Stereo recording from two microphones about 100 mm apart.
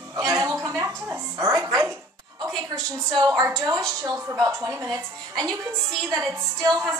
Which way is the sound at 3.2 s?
45° right (ahead or behind).